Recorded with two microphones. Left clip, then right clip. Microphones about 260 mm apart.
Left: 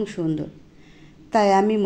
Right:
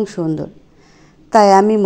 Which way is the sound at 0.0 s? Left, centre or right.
Right.